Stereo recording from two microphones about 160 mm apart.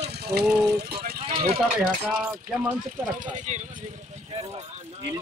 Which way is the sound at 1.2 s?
40° right (ahead or behind).